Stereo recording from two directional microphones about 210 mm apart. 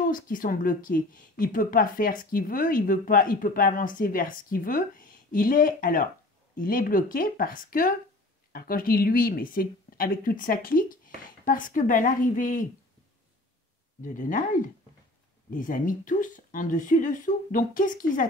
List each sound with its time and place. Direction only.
0.0 s a woman's voice: 40° left (ahead or behind)
14.0 s a woman's voice: 40° left (ahead or behind)